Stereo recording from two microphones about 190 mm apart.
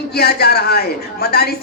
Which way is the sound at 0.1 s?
55° left (ahead or behind).